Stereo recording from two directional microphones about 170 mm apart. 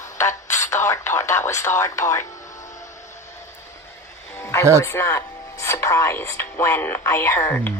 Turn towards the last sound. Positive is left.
turn(degrees=10)  # may be behind; listen again after turning